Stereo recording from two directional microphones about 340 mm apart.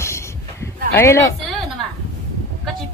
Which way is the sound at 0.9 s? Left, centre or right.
Centre.